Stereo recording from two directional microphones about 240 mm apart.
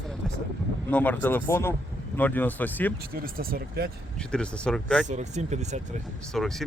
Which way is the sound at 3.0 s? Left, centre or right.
Right.